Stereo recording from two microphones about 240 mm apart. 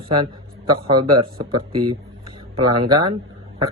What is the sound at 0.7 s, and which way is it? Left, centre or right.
Speech, centre.